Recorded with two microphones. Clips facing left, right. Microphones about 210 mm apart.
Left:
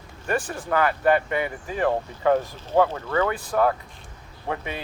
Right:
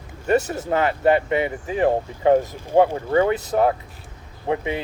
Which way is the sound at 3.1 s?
25° right (ahead or behind).